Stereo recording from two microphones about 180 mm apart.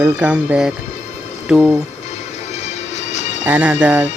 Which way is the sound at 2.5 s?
40° left (ahead or behind).